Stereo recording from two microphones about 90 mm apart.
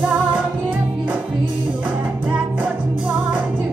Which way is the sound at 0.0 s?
15° right (ahead or behind).